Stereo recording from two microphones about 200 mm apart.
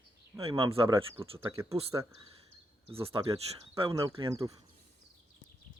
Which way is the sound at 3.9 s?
15° right (ahead or behind).